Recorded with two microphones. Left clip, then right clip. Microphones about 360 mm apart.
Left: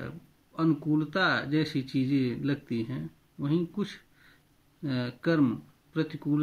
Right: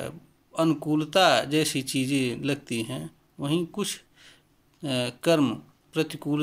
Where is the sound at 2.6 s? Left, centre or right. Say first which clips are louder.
Right 3 dB; right.